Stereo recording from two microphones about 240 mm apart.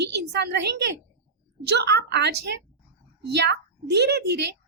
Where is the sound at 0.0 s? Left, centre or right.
Right.